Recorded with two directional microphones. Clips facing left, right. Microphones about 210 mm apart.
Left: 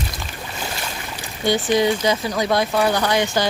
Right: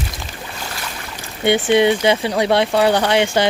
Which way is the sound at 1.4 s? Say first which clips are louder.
Right 4 dB; 25° right (ahead or behind).